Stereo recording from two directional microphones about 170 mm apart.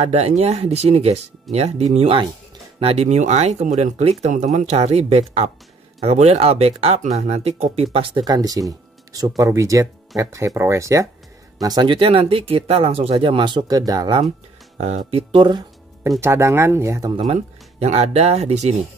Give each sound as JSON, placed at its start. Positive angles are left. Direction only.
{"t": 0.0, "sound": "speech", "side_deg": -40}
{"t": 14.8, "sound": "speech", "side_deg": -40}
{"t": 16.2, "sound": "speech", "side_deg": -15}
{"t": 17.1, "sound": "speech", "side_deg": -35}